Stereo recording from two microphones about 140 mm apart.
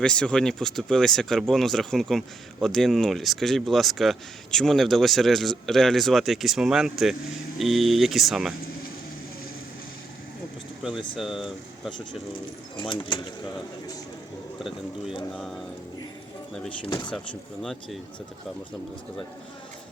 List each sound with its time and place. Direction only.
0.0 s speech: 5° left (ahead or behind)
11.2 s speech: centre (ahead or behind)
12.7 s speech: 35° left (ahead or behind)
15.3 s speech: centre (ahead or behind)
17.6 s speech: centre (ahead or behind)